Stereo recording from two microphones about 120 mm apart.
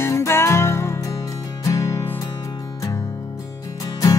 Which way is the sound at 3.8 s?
30° left (ahead or behind).